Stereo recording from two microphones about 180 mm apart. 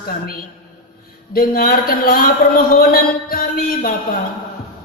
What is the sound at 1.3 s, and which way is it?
A man's voice, 55° left (ahead or behind).